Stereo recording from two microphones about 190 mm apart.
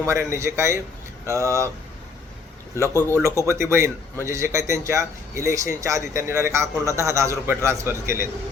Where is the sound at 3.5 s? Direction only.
15° right (ahead or behind).